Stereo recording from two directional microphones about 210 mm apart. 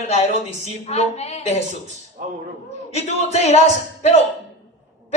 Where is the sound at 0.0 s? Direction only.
30° left (ahead or behind).